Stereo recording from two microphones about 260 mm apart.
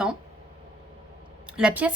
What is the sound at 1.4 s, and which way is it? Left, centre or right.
Speech, centre.